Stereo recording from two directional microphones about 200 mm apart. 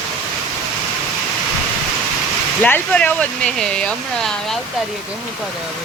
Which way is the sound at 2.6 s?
5° left (ahead or behind).